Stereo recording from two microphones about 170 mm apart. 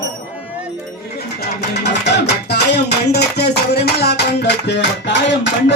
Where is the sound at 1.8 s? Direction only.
90° left.